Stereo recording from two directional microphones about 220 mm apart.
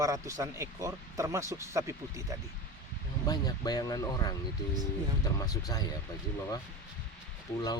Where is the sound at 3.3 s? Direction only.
15° left (ahead or behind).